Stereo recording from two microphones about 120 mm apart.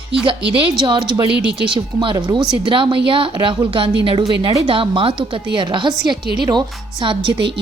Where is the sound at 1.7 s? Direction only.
45° right (ahead or behind).